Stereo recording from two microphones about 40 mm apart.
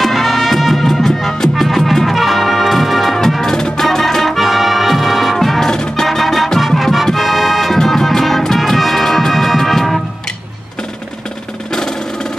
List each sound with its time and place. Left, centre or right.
0.0 s music: centre
2.0 s brass instrument: centre
3.5 s music: centre
5.7 s music: centre
6.0 s music: centre
11.7 s music: centre